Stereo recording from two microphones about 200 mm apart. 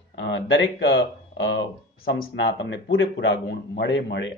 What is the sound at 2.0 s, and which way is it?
Speech, 55° left (ahead or behind).